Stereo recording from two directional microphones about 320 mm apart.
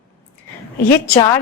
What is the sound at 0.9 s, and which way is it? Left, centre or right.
Speech, centre.